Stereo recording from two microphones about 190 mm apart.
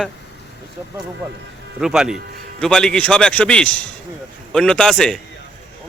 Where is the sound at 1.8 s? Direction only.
5° right (ahead or behind).